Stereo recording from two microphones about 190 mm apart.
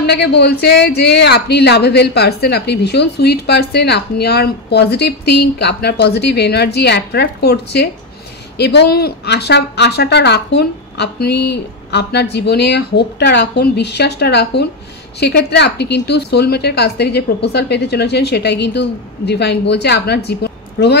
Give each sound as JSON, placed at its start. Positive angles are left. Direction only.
{"t": 0.0, "sound": "speech", "side_deg": 60}